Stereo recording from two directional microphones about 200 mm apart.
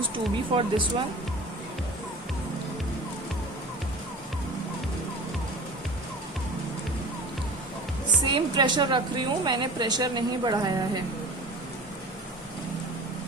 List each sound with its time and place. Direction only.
0.5 s a woman's voice: 25° right (ahead or behind)
8.2 s a woman's voice: 20° right (ahead or behind)